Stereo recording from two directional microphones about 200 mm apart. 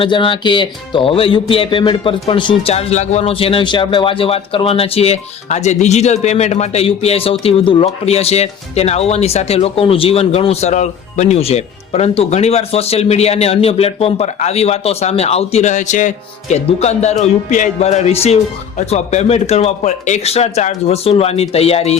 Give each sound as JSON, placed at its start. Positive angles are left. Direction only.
{"t": 0.0, "sound": "speech", "side_deg": 25}